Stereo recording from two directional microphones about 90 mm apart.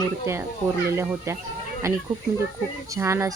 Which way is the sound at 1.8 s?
35° right (ahead or behind).